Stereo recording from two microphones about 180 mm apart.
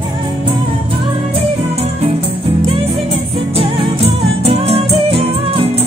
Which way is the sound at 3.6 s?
30° right (ahead or behind).